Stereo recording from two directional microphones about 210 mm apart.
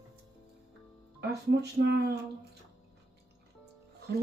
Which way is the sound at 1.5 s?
50° right (ahead or behind).